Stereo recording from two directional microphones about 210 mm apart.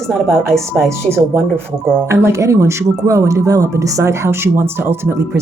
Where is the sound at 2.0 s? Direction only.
15° right (ahead or behind).